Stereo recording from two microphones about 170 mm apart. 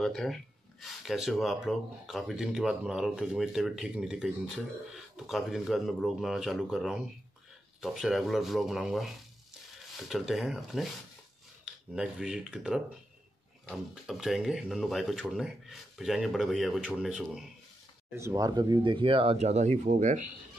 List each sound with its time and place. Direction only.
0.0 s speech: 5° left (ahead or behind)
18.1 s speech: 20° right (ahead or behind); by 20.2 s 45° right (ahead or behind)